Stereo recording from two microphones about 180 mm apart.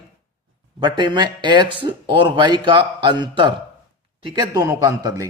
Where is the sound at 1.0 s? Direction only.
25° right (ahead or behind).